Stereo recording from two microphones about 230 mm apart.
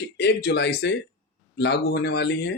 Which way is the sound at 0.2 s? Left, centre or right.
Left.